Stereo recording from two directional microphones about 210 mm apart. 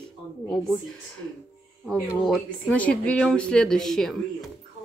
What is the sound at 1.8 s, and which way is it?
Speech, centre (ahead or behind).